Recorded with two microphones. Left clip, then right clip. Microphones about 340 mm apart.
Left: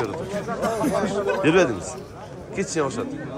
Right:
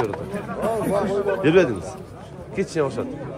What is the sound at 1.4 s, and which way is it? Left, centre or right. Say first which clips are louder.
A man's voice: right 1 dB; centre.